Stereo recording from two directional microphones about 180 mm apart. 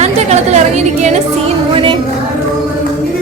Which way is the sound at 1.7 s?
30° right (ahead or behind).